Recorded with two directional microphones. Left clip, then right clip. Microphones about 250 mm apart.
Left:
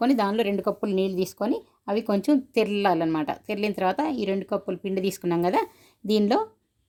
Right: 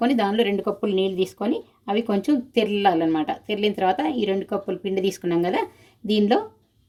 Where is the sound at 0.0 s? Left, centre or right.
Left.